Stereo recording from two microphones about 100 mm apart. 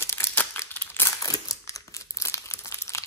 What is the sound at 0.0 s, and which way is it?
Crumpling, 25° left (ahead or behind).